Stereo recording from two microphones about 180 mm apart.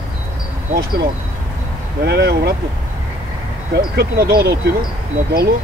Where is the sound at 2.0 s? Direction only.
65° right (ahead or behind).